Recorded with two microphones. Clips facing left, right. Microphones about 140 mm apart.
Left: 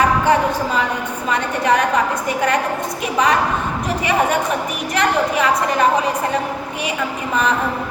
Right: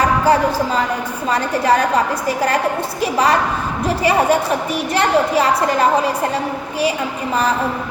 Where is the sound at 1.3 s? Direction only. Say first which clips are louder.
Right 2 dB; 35° right (ahead or behind).